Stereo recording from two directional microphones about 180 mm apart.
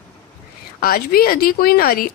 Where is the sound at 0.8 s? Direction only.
55° left (ahead or behind).